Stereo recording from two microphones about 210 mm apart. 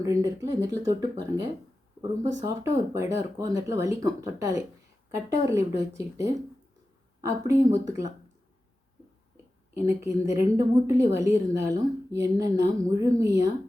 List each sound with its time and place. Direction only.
0.0 s a woman's voice: 15° right (ahead or behind)
7.2 s a woman's voice: 15° right (ahead or behind)
9.7 s a woman's voice: 15° right (ahead or behind)